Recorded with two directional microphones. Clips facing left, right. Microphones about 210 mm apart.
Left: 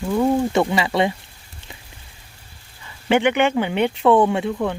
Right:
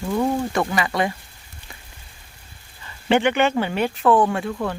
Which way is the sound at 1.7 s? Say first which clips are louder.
Left 3 dB; 20° left (ahead or behind).